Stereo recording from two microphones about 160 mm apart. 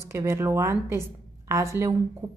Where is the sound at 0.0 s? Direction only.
15° right (ahead or behind).